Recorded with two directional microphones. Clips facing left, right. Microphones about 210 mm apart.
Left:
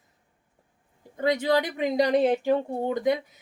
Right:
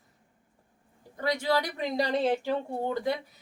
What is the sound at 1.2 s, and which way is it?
A woman's voice, 20° left (ahead or behind).